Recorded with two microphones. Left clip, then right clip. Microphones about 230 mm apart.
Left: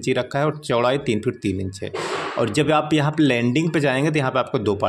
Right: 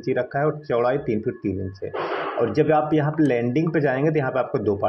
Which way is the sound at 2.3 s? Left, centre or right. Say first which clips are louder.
Even; left.